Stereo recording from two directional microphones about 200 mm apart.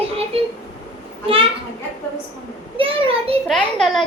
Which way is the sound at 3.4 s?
Centre (ahead or behind).